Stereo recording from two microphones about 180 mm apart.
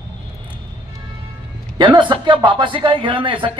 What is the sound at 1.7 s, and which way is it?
A man's voice, 25° right (ahead or behind).